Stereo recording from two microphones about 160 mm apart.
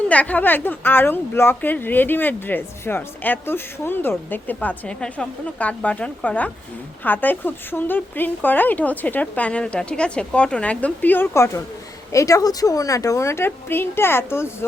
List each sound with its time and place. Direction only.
0.1 s speech: 10° left (ahead or behind)